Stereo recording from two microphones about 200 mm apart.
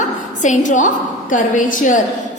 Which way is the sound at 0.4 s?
40° left (ahead or behind).